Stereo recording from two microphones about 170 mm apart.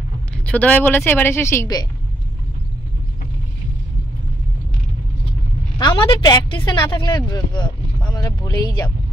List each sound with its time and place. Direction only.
0.5 s speech: 10° left (ahead or behind)
5.8 s a woman's voice: 25° left (ahead or behind)